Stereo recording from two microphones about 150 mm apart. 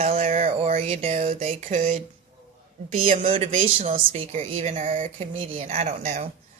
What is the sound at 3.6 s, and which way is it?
Speech, 65° right (ahead or behind).